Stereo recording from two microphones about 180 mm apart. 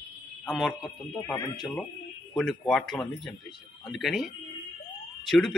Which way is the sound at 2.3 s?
Centre (ahead or behind).